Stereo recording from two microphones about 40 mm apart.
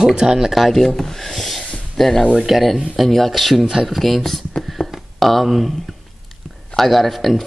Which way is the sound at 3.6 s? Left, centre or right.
Centre.